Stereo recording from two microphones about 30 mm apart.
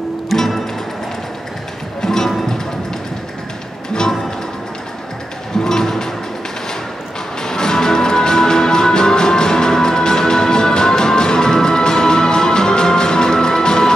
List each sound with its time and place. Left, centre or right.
0.3 s music: centre
2.0 s music: centre
5.6 s music: left
7.4 s music: left